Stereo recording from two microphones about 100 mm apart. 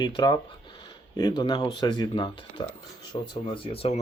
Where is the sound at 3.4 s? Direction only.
70° left (ahead or behind).